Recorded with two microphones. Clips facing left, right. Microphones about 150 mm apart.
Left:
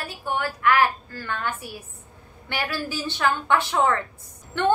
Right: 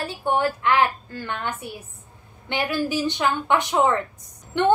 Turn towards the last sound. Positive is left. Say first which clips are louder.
# right 2 dB
turn(degrees=-20)  # may be behind; listen again after turning